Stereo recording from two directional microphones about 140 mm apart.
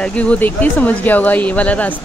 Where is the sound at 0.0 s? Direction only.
10° left (ahead or behind).